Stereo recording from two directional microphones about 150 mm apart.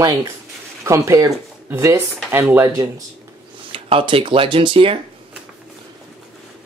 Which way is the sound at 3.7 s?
40° right (ahead or behind).